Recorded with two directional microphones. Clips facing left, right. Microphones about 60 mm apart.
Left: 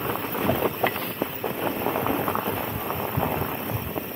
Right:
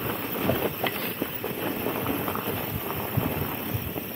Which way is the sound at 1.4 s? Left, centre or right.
Left.